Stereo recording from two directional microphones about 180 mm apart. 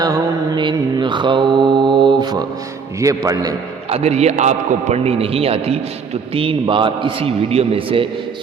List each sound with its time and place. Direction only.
0.0 s mantra: 25° right (ahead or behind)
3.0 s a man's voice: 20° right (ahead or behind)
3.8 s a man's voice: 35° right (ahead or behind)